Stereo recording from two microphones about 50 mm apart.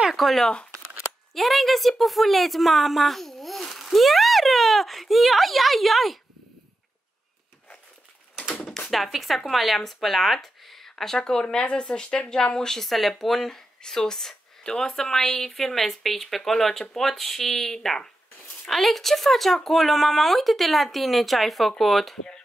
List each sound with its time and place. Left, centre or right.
0.1 s a woman's voice: centre
8.5 s a sound: centre
8.9 s a woman's voice: centre
12.6 s speech: centre